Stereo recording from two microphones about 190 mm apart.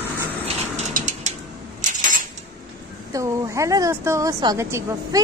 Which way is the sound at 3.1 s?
20° right (ahead or behind).